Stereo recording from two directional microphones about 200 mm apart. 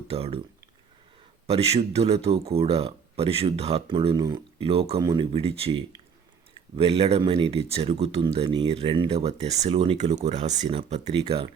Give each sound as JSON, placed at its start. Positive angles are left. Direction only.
{"t": 0.1, "sound": "speech", "side_deg": -30}
{"t": 1.5, "sound": "speech", "side_deg": -30}